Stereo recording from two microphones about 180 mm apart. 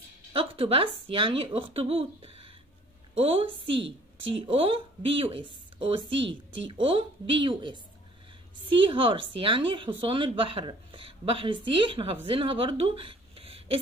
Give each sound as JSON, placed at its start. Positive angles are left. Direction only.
{"t": 0.3, "sound": "a woman's voice", "side_deg": -30}